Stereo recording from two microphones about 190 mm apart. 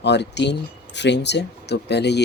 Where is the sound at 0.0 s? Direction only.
65° left (ahead or behind).